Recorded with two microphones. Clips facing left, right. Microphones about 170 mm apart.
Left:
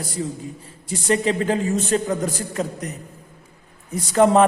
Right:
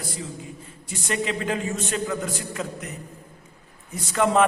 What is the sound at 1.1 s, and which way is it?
A man's voice, 35° left (ahead or behind).